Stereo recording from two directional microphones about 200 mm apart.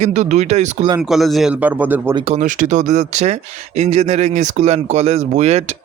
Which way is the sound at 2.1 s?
30° right (ahead or behind).